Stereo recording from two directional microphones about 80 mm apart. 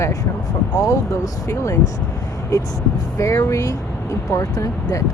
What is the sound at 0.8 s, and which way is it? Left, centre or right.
Speech, left.